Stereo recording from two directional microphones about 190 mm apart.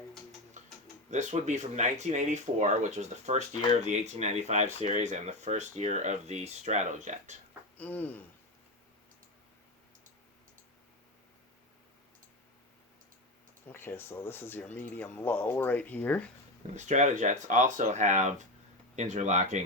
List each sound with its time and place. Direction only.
1.1 s speech: 40° right (ahead or behind)
7.8 s speech: 10° left (ahead or behind)
13.7 s speech: 10° left (ahead or behind)
16.7 s speech: 40° right (ahead or behind)